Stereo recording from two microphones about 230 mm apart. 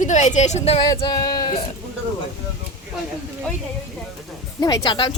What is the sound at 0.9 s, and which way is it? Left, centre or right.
Speech, centre.